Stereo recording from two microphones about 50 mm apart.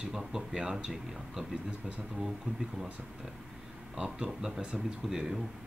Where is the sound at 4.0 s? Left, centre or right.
Centre.